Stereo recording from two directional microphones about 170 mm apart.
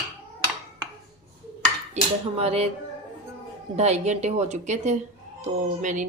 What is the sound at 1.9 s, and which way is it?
Cutlery, 35° right (ahead or behind).